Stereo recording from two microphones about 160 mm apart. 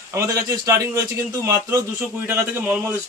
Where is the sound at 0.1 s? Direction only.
20° right (ahead or behind).